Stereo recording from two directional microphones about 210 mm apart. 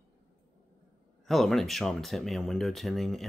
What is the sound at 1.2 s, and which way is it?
Speech, centre (ahead or behind).